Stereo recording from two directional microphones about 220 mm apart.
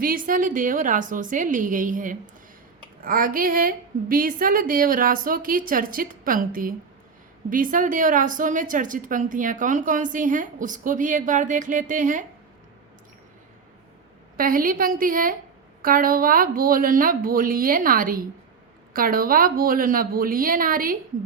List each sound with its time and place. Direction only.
0.0 s a woman's voice: 40° right (ahead or behind)
14.3 s a woman's voice: 40° right (ahead or behind)